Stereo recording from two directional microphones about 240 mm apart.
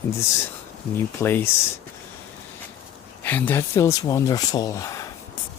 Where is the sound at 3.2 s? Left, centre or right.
Centre.